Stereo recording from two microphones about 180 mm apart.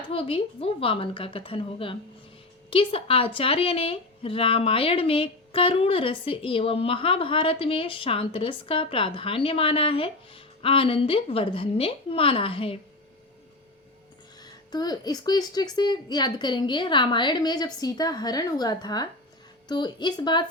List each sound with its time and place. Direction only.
0.1 s a woman's voice: 30° left (ahead or behind)
14.7 s a woman's voice: 20° left (ahead or behind)